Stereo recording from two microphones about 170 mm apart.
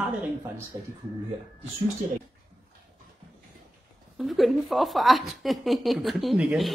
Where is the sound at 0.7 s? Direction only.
20° right (ahead or behind).